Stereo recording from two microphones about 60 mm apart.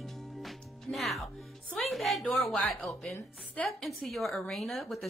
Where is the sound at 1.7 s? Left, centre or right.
Centre.